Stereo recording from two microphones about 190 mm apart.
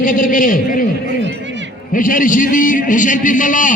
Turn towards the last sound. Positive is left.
turn(degrees=45)  # may be behind; listen again after turning